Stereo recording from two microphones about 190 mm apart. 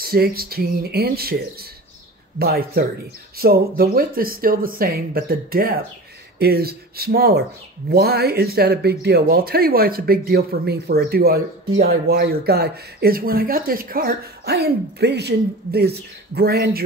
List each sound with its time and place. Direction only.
0.0 s speech: 50° right (ahead or behind)